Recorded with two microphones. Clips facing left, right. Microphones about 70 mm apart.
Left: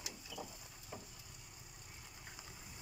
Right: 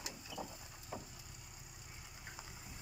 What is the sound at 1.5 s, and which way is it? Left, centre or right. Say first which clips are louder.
Vehicle: right 1 dB; centre.